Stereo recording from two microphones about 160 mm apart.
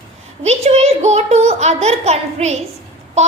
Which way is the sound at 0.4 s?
40° right (ahead or behind).